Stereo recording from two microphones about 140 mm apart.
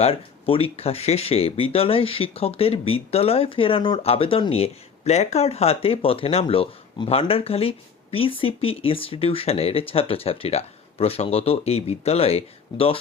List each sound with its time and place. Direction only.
0.0 s speech: 40° left (ahead or behind)